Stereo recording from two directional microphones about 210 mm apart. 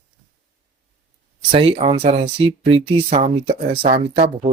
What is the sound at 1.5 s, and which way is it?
Speech, 25° right (ahead or behind).